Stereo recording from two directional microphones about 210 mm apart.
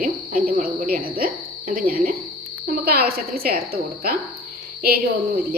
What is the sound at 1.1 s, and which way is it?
Cricket, 45° right (ahead or behind).